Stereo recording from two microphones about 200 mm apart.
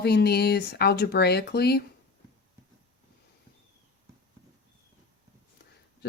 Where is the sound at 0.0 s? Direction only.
55° left (ahead or behind).